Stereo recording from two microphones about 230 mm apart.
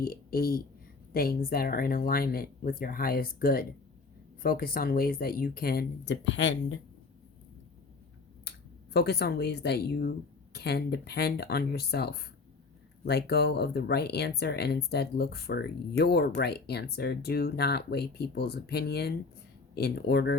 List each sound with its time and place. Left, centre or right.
0.0 s speech: left
8.4 s speech: left